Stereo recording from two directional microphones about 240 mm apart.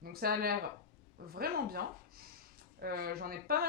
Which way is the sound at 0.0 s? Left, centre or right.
Right.